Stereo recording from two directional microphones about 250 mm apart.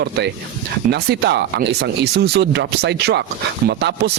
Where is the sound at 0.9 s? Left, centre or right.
Right.